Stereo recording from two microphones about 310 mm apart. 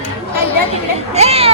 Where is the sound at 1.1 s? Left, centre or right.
Centre.